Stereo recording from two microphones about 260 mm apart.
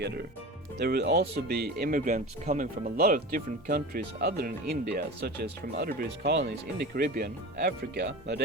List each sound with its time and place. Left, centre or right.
0.0 s speech: right